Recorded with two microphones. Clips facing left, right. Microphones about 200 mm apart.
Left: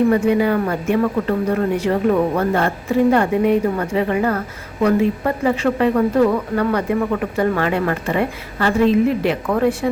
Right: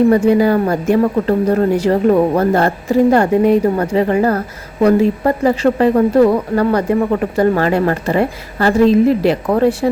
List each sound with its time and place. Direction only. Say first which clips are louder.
0.1 s speech: right 4 dB; 35° right (ahead or behind)